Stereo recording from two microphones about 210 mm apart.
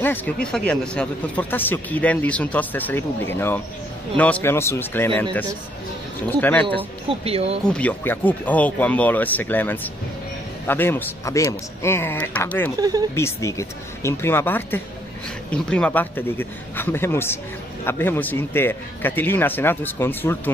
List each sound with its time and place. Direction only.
0.0 s speech: 10° left (ahead or behind)
7.1 s speech: 30° right (ahead or behind)
7.6 s speech: 5° left (ahead or behind)